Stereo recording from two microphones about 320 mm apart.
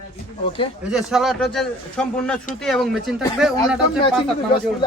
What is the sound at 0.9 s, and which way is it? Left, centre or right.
A man's voice, centre.